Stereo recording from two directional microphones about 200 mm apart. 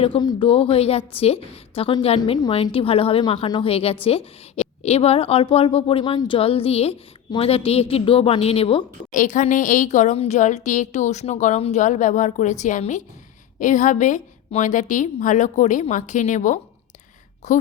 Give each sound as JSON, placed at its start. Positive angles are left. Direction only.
{"t": 0.0, "sound": "a woman's voice", "side_deg": 25}
{"t": 9.1, "sound": "a woman's voice", "side_deg": 40}